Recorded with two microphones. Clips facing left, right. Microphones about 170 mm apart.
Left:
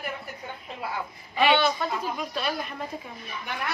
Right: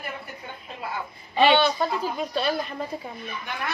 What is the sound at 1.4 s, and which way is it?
Speech, 30° right (ahead or behind).